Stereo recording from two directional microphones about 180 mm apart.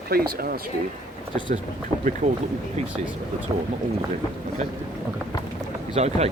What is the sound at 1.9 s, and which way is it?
Speech, 15° left (ahead or behind).